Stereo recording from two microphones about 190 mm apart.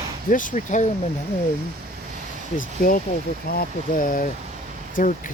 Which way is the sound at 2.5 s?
45° left (ahead or behind).